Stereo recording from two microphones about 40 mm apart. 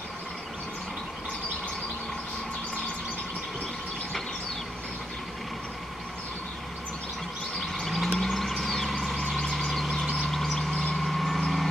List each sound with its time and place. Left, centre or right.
7.8 s vehicle: centre
10.7 s vehicle: centre
11.0 s vehicle: centre